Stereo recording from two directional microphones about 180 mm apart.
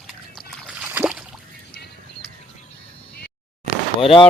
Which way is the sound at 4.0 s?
30° left (ahead or behind).